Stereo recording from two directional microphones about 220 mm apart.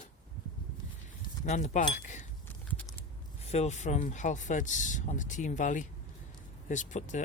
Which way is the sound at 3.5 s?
30° left (ahead or behind).